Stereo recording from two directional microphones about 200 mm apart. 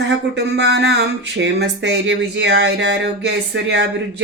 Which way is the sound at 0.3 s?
55° right (ahead or behind).